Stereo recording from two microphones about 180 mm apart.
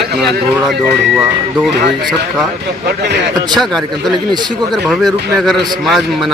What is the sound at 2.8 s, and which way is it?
Speech, 70° right (ahead or behind).